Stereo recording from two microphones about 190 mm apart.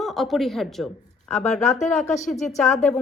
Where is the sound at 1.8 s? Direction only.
40° left (ahead or behind).